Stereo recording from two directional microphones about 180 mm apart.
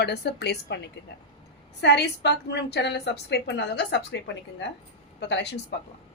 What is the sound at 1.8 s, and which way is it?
A woman's voice, 70° left (ahead or behind).